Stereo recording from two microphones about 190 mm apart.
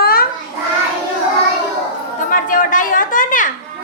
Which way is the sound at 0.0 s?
50° left (ahead or behind).